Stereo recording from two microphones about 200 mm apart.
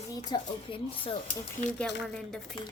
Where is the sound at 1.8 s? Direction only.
Centre (ahead or behind).